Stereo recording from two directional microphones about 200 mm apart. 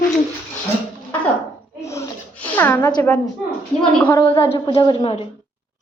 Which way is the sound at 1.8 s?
15° left (ahead or behind).